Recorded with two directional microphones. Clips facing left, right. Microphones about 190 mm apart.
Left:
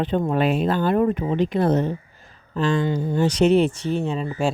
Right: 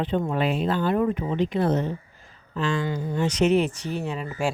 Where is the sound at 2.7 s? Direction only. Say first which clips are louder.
Left 5 dB; 25° left (ahead or behind).